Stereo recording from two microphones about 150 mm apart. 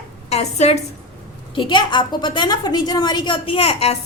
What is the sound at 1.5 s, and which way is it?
A woman's voice, 30° left (ahead or behind).